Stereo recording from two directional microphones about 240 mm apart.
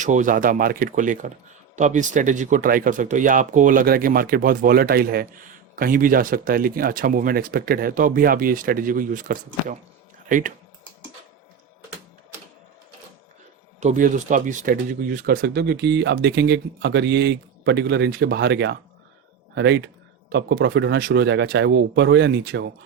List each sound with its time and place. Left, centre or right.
0.0 s speech: right
13.7 s speech: right